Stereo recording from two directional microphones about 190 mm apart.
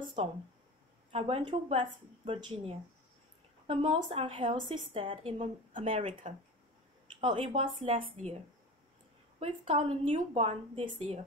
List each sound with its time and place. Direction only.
0.0 s a sound: 25° right (ahead or behind)
1.1 s speech: 30° right (ahead or behind)
5.7 s speech: 40° right (ahead or behind)
9.4 s speech: 30° right (ahead or behind)